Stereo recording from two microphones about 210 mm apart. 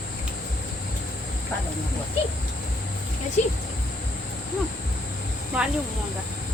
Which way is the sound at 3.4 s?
35° left (ahead or behind).